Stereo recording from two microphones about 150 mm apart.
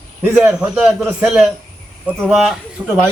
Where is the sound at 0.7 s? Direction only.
5° right (ahead or behind).